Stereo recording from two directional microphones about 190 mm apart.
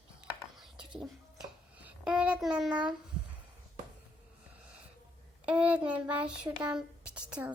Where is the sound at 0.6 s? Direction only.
Centre (ahead or behind).